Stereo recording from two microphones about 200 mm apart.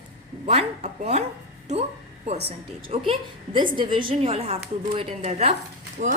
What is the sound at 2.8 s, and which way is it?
A woman's voice, 25° right (ahead or behind).